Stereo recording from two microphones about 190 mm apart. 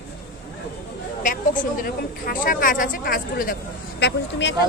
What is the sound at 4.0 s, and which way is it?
Speech, 70° left (ahead or behind).